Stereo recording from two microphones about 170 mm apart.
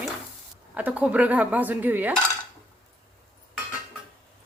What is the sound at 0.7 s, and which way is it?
Speech, 10° right (ahead or behind).